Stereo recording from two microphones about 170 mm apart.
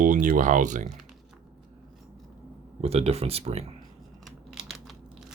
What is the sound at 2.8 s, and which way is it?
Speech, 35° right (ahead or behind).